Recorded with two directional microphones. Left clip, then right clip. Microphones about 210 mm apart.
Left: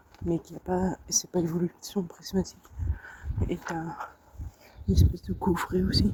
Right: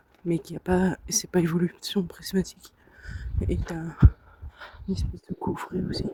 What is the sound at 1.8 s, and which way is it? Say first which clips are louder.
Speech: right 8 dB; 60° right (ahead or behind).